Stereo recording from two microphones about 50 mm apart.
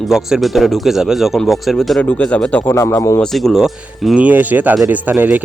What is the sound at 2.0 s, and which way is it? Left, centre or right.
Speech, left.